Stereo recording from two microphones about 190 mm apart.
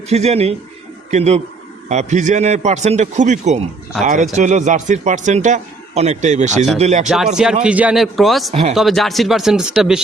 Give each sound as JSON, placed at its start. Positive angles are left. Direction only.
{"t": 0.1, "sound": "a man's voice", "side_deg": -35}
{"t": 7.6, "sound": "speech", "side_deg": -5}